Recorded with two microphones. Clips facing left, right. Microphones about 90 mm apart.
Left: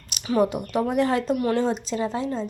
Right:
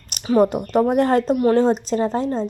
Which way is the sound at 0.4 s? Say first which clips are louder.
Right 6 dB; 45° right (ahead or behind).